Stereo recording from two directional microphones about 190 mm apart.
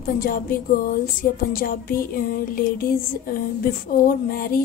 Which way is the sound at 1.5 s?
50° left (ahead or behind).